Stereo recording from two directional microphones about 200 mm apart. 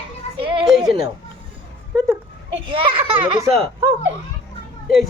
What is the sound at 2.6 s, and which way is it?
Speech, 25° right (ahead or behind).